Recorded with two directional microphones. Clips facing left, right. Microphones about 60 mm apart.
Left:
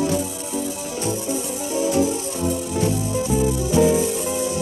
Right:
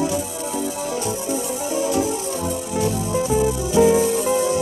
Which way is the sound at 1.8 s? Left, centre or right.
Right.